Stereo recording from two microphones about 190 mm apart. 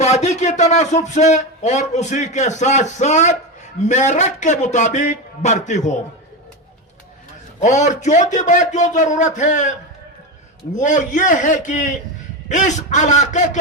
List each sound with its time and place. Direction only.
0.0 s a man's voice: 35° left (ahead or behind)
7.6 s a man's voice: 40° left (ahead or behind)
10.8 s a man's voice: 40° left (ahead or behind)